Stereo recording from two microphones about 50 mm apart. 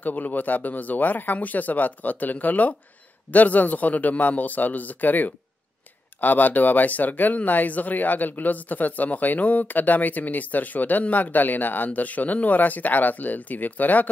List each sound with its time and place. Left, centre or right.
0.0 s speech: left